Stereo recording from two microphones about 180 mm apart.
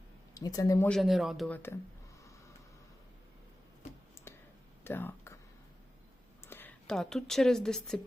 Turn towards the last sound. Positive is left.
turn(degrees=5)  # may be behind; listen again after turning